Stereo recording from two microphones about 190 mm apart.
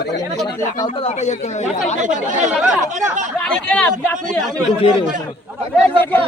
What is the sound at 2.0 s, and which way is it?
Speech, 40° right (ahead or behind).